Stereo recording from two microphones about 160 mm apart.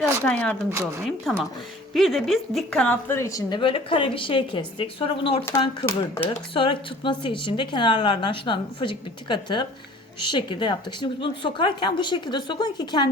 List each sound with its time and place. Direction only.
0.3 s speech: 5° left (ahead or behind)
0.7 s speech: 15° right (ahead or behind)
1.3 s a woman's voice: centre (ahead or behind); by 5.5 s 35° left (ahead or behind)
5.5 s speech: 15° left (ahead or behind)
6.2 s a woman's voice: 35° left (ahead or behind)